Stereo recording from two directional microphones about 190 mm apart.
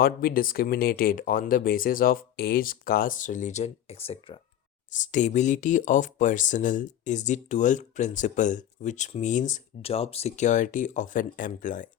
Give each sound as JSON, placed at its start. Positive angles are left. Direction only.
{"t": 0.0, "sound": "speech", "side_deg": 50}